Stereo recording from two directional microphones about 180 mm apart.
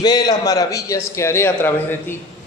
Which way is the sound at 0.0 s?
25° left (ahead or behind).